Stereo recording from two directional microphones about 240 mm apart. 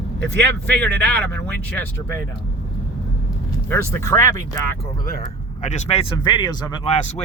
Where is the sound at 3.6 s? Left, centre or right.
Centre.